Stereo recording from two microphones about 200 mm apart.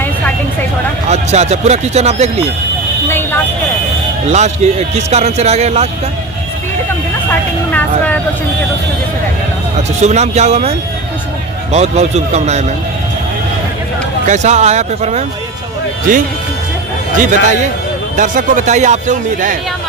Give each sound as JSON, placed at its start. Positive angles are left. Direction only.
{"t": 1.0, "sound": "a man's voice", "side_deg": -35}
{"t": 4.3, "sound": "a man's voice", "side_deg": -35}
{"t": 7.3, "sound": "speech", "side_deg": 10}
{"t": 10.0, "sound": "a man's voice", "side_deg": -35}
{"t": 14.3, "sound": "a man's voice", "side_deg": -35}
{"t": 17.2, "sound": "a man's voice", "side_deg": -35}